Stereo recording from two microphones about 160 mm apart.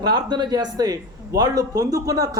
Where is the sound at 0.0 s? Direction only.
25° right (ahead or behind).